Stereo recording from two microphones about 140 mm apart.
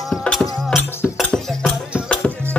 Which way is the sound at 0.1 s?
5° left (ahead or behind).